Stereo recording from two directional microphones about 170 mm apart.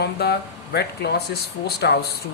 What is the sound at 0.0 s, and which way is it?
Speech, 70° left (ahead or behind).